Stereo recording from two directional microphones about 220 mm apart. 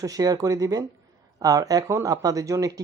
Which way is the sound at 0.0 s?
15° right (ahead or behind).